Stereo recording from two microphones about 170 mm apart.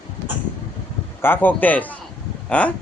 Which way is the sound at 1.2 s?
10° left (ahead or behind).